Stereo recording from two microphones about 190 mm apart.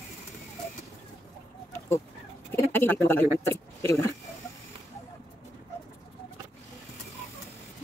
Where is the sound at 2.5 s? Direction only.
10° left (ahead or behind).